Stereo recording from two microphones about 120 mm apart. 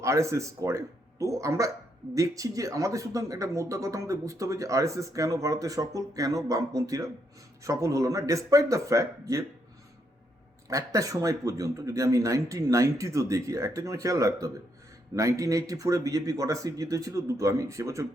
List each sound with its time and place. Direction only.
0.0 s speech: 25° right (ahead or behind)
10.7 s speech: 30° right (ahead or behind)